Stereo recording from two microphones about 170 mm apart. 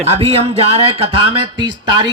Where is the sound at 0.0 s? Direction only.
35° right (ahead or behind).